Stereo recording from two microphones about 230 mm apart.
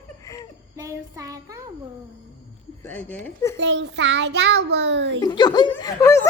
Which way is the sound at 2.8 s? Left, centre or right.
Centre.